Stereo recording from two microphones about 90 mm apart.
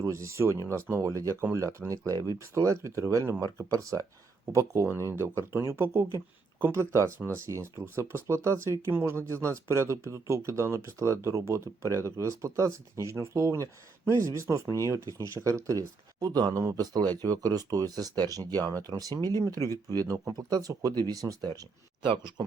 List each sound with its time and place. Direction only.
0.0 s speech: 35° right (ahead or behind)
19.5 s speech: 35° left (ahead or behind)
19.9 s speech: 45° right (ahead or behind)